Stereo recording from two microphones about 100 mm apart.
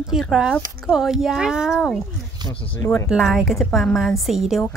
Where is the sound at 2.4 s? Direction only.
45° right (ahead or behind).